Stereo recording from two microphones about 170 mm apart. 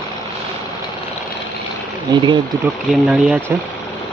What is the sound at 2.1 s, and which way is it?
Speech, 20° right (ahead or behind).